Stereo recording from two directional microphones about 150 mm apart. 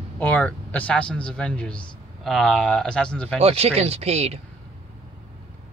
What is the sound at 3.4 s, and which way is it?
Speech, 40° right (ahead or behind).